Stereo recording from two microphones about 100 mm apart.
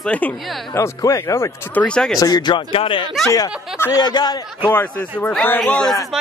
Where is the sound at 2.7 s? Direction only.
65° left (ahead or behind).